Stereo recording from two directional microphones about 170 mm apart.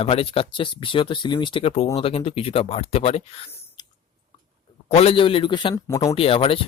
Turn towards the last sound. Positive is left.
turn(degrees=30)  # may be behind; listen again after turning